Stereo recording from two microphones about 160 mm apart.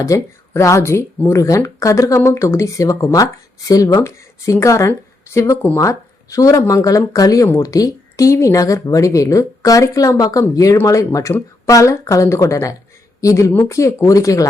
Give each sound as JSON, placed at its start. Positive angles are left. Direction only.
{"t": 0.0, "sound": "speech", "side_deg": 20}